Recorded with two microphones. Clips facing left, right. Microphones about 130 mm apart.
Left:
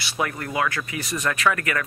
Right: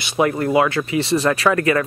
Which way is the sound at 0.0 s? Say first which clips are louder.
Right 9 dB; 20° right (ahead or behind).